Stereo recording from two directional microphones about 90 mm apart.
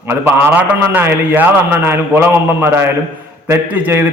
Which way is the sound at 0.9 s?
25° right (ahead or behind).